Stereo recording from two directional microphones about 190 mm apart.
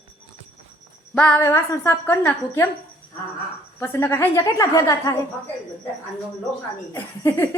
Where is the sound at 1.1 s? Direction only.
5° left (ahead or behind).